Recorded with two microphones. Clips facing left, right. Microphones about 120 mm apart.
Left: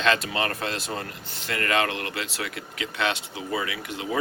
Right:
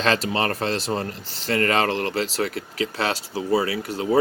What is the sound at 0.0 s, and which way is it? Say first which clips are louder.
Speech: right 3 dB; 35° right (ahead or behind).